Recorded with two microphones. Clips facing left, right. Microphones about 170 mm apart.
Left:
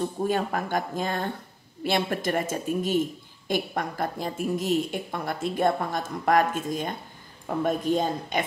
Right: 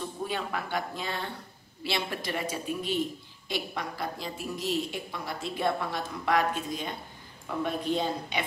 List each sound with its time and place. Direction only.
0.2 s speech: 45° left (ahead or behind)